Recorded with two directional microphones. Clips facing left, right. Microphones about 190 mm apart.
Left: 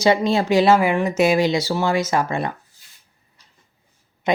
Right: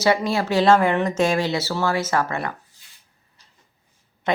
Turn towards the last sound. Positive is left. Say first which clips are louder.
# left 3 dB
turn(degrees=10)  # may be behind; listen again after turning